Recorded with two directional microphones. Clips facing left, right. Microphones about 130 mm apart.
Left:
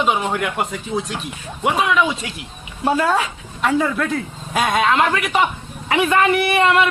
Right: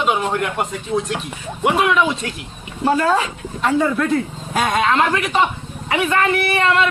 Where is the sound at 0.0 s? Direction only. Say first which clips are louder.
Even; centre (ahead or behind).